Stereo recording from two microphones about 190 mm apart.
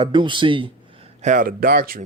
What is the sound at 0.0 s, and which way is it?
Speech, 25° right (ahead or behind).